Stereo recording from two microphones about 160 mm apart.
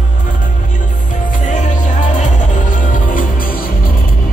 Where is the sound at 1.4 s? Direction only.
50° left (ahead or behind).